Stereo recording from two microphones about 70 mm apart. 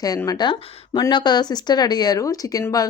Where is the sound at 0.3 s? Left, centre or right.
Left.